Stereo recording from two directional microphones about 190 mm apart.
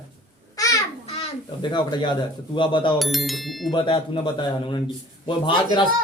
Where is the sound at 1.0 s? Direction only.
30° left (ahead or behind).